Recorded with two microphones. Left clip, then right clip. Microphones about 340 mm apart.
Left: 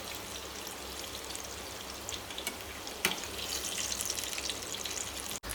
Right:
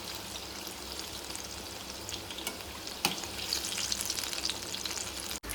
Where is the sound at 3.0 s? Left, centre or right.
Centre.